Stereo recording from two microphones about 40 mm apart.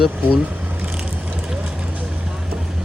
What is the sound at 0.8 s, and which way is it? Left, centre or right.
Vehicle, right.